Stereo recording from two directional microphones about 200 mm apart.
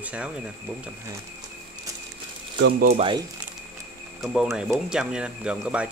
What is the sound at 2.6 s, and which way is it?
Speech, 50° right (ahead or behind).